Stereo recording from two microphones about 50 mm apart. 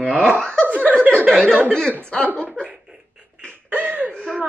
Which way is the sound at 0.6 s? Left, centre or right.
Right.